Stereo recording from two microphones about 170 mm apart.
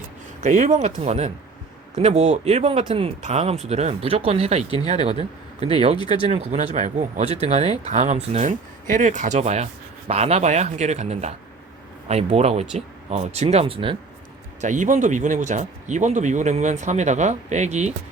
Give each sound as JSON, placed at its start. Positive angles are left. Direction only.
{"t": 0.4, "sound": "speech", "side_deg": -45}
{"t": 6.0, "sound": "speech", "side_deg": 25}
{"t": 6.2, "sound": "speech", "side_deg": -35}
{"t": 14.6, "sound": "speech", "side_deg": -45}